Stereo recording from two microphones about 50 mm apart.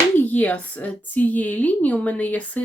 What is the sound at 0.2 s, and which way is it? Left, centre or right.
A woman's voice, left.